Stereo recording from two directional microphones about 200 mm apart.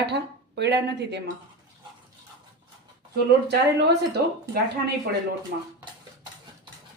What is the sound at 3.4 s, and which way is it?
Speech, 60° right (ahead or behind).